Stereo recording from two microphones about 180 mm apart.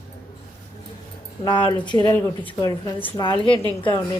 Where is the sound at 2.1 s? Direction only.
10° left (ahead or behind).